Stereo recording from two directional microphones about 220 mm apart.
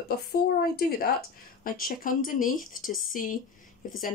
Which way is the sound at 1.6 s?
40° left (ahead or behind).